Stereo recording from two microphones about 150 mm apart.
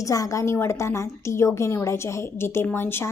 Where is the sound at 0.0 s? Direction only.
20° left (ahead or behind).